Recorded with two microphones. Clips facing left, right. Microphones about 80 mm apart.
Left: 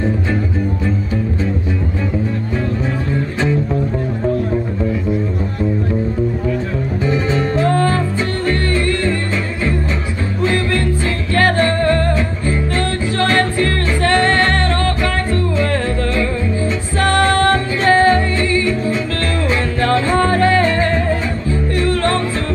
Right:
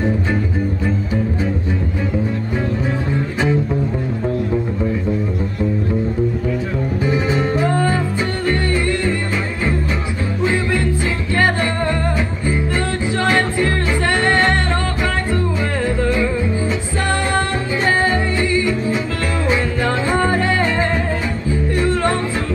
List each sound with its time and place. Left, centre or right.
7.1 s music: centre
10.4 s music: centre
16.0 s music: centre